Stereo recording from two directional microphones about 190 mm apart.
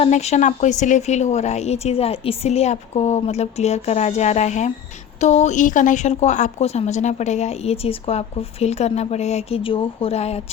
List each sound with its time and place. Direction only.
0.0 s a woman's voice: 35° left (ahead or behind)